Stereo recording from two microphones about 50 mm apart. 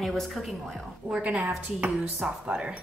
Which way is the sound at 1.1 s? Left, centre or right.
Right.